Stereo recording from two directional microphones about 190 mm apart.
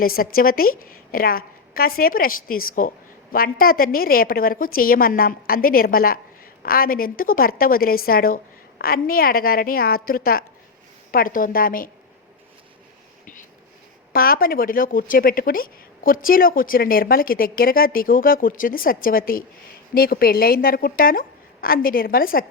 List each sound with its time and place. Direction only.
0.0 s a woman's voice: 50° left (ahead or behind)
14.1 s a woman's voice: 50° left (ahead or behind)